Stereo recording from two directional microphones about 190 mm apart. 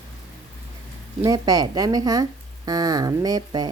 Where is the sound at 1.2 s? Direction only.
20° right (ahead or behind).